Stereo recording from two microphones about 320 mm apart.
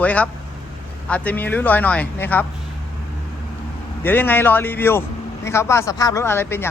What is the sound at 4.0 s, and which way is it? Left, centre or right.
Speech, centre.